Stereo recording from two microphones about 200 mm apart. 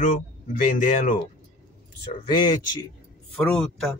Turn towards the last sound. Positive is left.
turn(degrees=0)  # may be behind; listen again after turning